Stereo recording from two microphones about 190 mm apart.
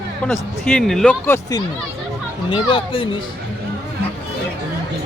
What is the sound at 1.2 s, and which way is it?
Speech, 10° left (ahead or behind).